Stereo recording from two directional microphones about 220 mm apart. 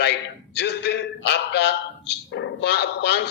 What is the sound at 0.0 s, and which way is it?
A man's voice, 50° left (ahead or behind).